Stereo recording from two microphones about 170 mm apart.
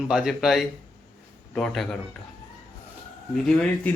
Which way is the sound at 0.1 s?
5° right (ahead or behind).